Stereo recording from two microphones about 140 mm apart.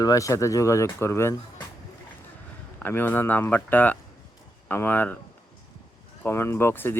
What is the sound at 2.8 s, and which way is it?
Speech, 15° left (ahead or behind).